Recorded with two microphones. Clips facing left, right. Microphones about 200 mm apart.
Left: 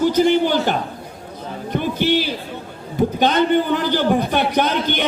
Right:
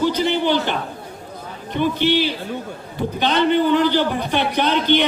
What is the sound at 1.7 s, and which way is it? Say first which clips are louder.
A man's voice: even; 45° left (ahead or behind).